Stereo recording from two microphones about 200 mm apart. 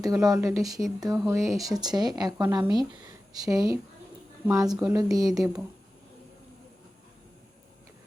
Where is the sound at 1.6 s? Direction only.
20° right (ahead or behind).